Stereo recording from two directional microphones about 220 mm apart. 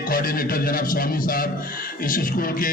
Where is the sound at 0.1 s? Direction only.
40° left (ahead or behind).